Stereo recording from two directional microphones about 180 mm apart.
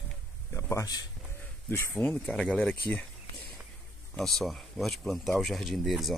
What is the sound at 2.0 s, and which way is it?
Speech, 5° left (ahead or behind).